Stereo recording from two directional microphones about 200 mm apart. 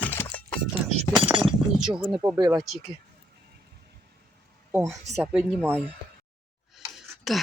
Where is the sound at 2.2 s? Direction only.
15° right (ahead or behind).